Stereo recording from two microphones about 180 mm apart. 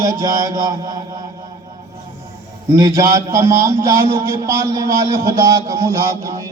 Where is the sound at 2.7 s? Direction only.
20° right (ahead or behind).